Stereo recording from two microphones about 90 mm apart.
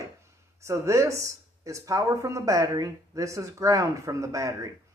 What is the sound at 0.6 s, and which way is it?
Speech, 30° right (ahead or behind).